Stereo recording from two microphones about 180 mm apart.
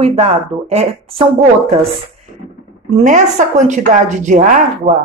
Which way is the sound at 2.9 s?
40° right (ahead or behind).